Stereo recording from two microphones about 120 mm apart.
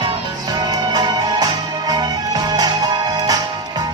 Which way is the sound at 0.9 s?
35° right (ahead or behind).